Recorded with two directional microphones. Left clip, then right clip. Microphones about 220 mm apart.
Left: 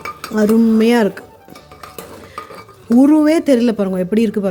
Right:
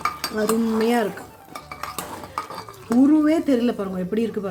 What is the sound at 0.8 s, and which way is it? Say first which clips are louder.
Speech: left 7 dB; 45° left (ahead or behind).